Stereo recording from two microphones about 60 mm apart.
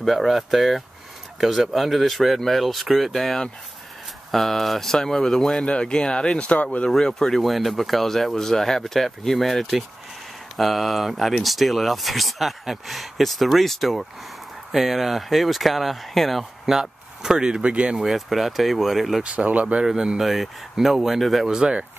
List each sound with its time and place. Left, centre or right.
0.0 s speech: centre
18.0 s speech: centre
19.2 s speech: right
19.9 s speech: centre
21.5 s speech: centre